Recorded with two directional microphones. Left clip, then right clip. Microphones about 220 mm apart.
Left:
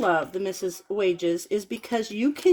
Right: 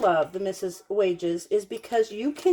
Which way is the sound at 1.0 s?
40° left (ahead or behind).